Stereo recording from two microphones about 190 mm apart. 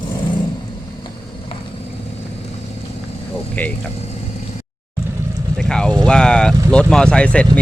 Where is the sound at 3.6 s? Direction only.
10° left (ahead or behind).